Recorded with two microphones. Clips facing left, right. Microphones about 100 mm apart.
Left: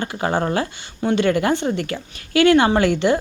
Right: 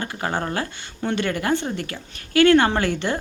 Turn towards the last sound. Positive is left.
turn(degrees=15)  # may be behind; listen again after turning